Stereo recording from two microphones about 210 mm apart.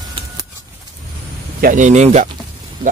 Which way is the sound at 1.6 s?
35° right (ahead or behind).